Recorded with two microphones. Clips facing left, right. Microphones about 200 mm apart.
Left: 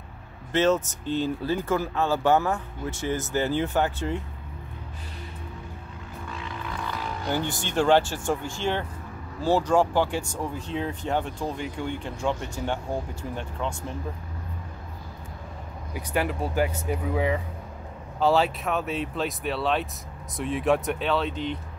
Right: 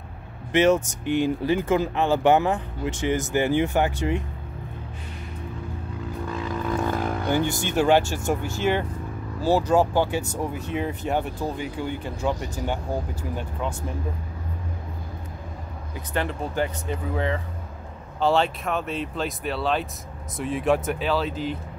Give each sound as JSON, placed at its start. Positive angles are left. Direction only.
{"t": 0.5, "sound": "speech", "side_deg": -15}
{"t": 6.3, "sound": "vehicle", "side_deg": -40}
{"t": 7.3, "sound": "speech", "side_deg": -10}
{"t": 13.4, "sound": "speech", "side_deg": -5}
{"t": 15.9, "sound": "speech", "side_deg": 10}